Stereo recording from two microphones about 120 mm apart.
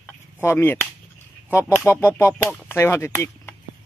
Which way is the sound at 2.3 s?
10° left (ahead or behind).